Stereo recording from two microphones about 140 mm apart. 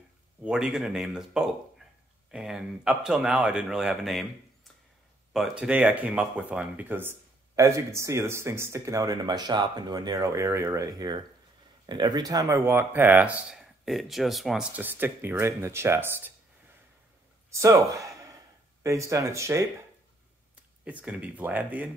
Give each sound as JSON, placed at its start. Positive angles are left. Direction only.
{"t": 0.4, "sound": "speech", "side_deg": -5}
{"t": 5.3, "sound": "speech", "side_deg": -5}
{"t": 13.8, "sound": "speech", "side_deg": 0}
{"t": 14.8, "sound": "speech", "side_deg": -15}
{"t": 17.5, "sound": "speech", "side_deg": -20}
{"t": 20.8, "sound": "speech", "side_deg": -10}